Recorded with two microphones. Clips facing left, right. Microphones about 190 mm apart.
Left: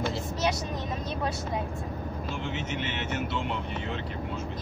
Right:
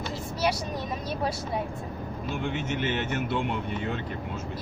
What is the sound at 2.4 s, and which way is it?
Speech, 50° right (ahead or behind).